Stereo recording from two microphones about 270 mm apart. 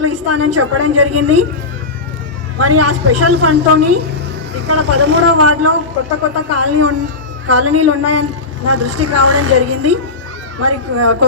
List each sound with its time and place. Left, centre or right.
0.0 s a woman's voice: right
2.6 s a woman's voice: right